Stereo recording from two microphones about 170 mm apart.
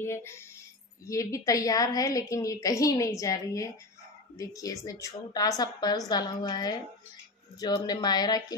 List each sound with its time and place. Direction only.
0.0 s a woman's voice: 15° left (ahead or behind)